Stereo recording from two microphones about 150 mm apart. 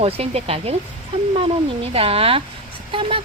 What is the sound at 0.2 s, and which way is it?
Speech, 40° right (ahead or behind).